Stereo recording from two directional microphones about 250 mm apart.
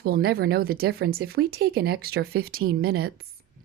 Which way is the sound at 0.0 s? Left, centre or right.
Right.